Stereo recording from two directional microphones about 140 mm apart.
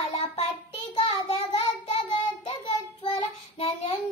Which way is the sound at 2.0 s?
40° left (ahead or behind).